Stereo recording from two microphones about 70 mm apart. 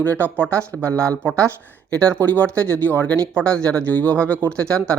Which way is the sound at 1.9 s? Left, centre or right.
Centre.